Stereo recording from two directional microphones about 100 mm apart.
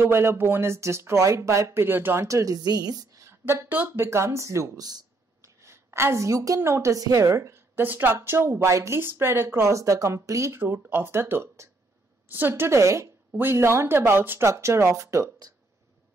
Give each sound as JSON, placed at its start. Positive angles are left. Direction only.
{"t": 0.0, "sound": "a woman's voice", "side_deg": -25}
{"t": 2.2, "sound": "a woman's voice", "side_deg": -35}
{"t": 3.3, "sound": "speech", "side_deg": -25}
{"t": 5.6, "sound": "a woman's voice", "side_deg": -25}